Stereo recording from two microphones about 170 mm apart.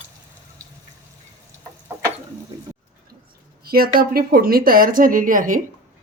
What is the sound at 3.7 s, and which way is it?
Speech, 60° right (ahead or behind).